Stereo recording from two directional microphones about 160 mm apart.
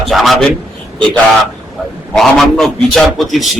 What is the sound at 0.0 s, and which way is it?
Speech, centre (ahead or behind).